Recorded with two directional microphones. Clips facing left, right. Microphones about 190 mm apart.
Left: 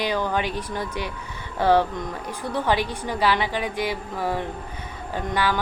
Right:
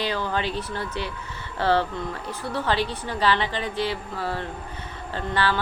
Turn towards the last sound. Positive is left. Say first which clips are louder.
# left 1 dB
turn(degrees=15)  # may be behind; listen again after turning